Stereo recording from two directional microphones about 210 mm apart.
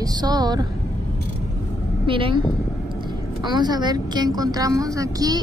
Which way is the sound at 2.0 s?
25° right (ahead or behind).